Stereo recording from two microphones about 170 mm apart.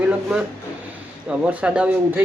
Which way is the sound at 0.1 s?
5° right (ahead or behind).